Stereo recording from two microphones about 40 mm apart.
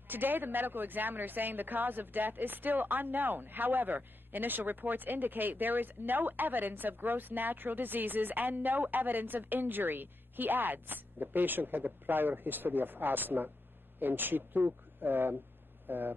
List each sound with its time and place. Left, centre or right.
0.1 s a woman's voice: right